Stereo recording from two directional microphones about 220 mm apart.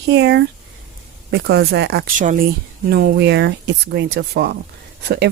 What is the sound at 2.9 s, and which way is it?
A woman's voice, 50° right (ahead or behind).